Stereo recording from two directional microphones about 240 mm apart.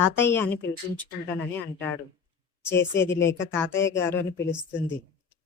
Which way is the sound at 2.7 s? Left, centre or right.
Centre.